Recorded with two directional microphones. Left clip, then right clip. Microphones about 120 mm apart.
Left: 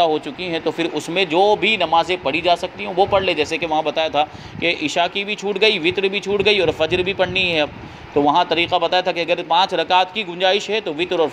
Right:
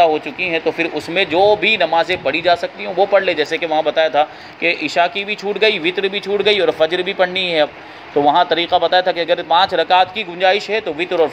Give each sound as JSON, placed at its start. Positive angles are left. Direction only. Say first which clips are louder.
{"t": 0.0, "sound": "speech", "louder": "right 4 dB", "side_deg": 30}